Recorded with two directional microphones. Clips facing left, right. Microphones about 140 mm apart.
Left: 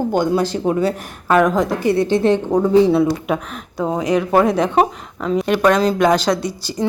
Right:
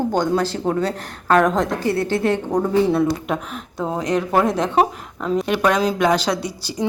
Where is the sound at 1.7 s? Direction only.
15° left (ahead or behind).